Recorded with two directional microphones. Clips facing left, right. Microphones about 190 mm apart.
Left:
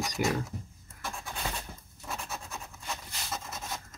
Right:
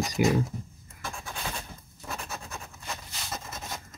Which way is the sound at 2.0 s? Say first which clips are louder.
Right 1 dB; centre (ahead or behind).